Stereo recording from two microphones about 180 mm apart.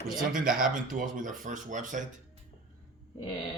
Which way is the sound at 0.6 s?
50° right (ahead or behind).